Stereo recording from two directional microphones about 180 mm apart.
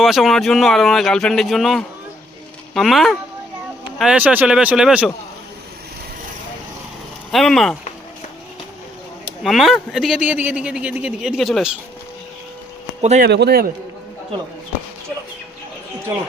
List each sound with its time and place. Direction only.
0.0 s speech: centre (ahead or behind)
7.3 s speech: centre (ahead or behind)
9.4 s speech: centre (ahead or behind)
13.0 s speech: 40° right (ahead or behind)
13.2 s a man's voice: 65° right (ahead or behind)